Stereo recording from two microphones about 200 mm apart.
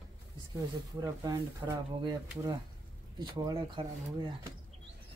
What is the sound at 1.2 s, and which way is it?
Speech, 20° right (ahead or behind).